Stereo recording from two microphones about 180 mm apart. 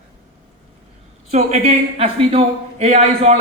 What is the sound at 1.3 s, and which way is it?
A man's voice, 35° right (ahead or behind).